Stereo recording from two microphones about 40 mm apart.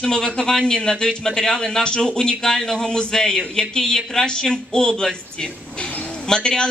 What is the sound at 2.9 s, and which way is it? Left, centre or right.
Speech, centre.